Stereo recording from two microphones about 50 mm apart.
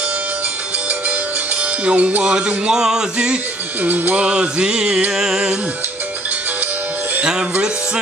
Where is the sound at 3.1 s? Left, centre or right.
Right.